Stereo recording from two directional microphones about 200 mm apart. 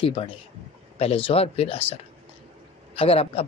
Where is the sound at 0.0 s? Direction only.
25° left (ahead or behind).